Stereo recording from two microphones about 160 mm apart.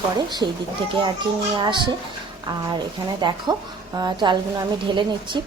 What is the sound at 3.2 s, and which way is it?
A woman's voice, 30° right (ahead or behind).